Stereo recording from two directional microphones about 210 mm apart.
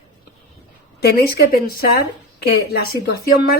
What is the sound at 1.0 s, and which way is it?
A woman's voice, 50° left (ahead or behind).